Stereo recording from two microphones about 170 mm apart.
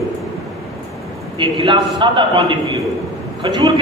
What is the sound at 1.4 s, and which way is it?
A man's voice, 30° right (ahead or behind).